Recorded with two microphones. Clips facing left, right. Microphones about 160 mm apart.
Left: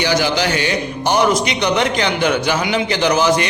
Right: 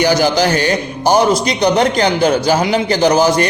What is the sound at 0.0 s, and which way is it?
A man's voice, 45° right (ahead or behind).